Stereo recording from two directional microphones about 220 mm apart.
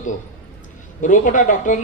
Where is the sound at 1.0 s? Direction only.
35° left (ahead or behind).